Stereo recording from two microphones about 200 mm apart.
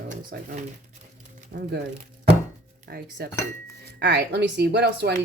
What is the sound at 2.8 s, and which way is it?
A woman's voice, 50° right (ahead or behind).